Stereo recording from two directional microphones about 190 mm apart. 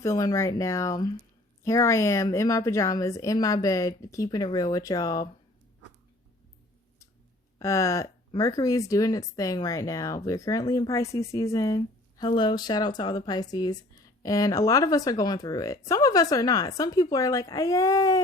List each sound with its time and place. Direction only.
0.0 s a woman's voice: 15° left (ahead or behind)
7.6 s a woman's voice: 15° left (ahead or behind)